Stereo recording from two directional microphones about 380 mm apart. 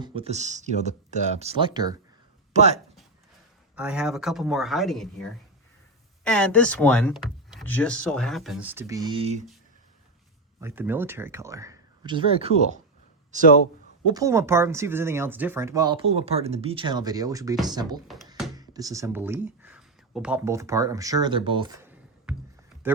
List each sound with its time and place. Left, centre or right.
0.0 s speech: centre
3.8 s speech: centre
10.6 s speech: centre
14.1 s speech: centre